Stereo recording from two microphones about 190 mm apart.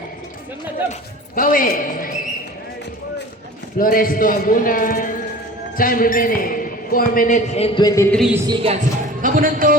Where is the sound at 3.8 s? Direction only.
45° left (ahead or behind).